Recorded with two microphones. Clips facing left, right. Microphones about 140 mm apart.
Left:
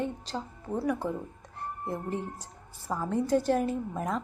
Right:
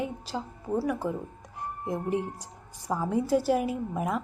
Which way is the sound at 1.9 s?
15° right (ahead or behind).